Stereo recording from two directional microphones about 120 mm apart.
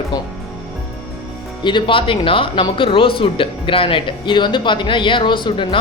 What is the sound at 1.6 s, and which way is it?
Speech, 45° left (ahead or behind).